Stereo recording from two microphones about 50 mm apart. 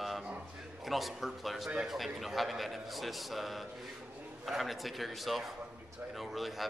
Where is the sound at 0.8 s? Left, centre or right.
Centre.